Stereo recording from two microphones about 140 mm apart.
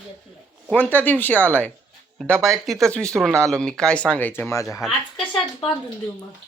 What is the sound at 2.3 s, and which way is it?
Speech, 20° right (ahead or behind).